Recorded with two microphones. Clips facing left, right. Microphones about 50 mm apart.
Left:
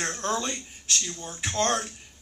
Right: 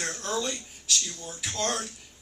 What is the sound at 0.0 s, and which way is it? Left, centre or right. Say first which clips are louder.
Speech: left 2 dB; left.